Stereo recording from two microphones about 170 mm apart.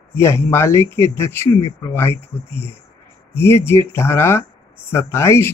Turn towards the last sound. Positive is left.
turn(degrees=15)  # may be behind; listen again after turning